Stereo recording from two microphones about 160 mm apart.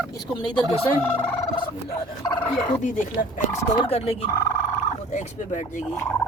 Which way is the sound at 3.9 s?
35° left (ahead or behind).